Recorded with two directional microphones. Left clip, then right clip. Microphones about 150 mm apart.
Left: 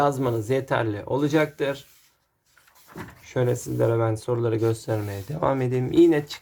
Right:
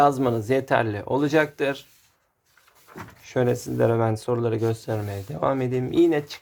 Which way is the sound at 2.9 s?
10° right (ahead or behind).